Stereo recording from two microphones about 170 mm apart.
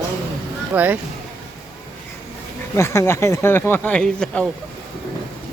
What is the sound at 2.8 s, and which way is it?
Speech, 15° left (ahead or behind).